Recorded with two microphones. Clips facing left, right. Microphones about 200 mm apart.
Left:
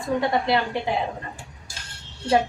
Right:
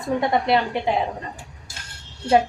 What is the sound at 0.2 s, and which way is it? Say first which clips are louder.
Speech: right 3 dB; 20° right (ahead or behind).